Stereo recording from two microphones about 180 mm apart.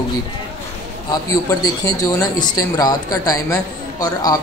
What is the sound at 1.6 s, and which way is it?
Speech, 20° left (ahead or behind).